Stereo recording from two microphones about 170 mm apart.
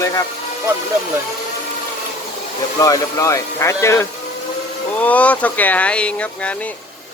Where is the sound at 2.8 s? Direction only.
20° left (ahead or behind).